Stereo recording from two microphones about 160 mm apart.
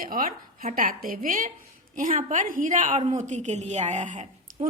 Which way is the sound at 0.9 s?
65° right (ahead or behind).